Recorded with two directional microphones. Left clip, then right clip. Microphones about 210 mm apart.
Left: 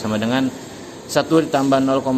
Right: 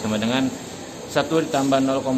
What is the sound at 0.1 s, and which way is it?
A man's voice, 20° left (ahead or behind).